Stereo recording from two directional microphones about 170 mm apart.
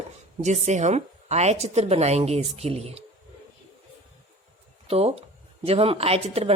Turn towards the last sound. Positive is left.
turn(degrees=-35)  # may be behind; listen again after turning